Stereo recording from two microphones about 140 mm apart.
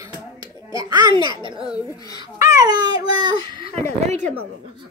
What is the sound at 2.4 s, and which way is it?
A child's voice, 25° right (ahead or behind).